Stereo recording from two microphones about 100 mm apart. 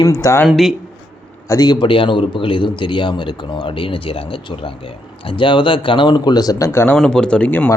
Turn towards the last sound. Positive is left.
turn(degrees=15)  # may be behind; listen again after turning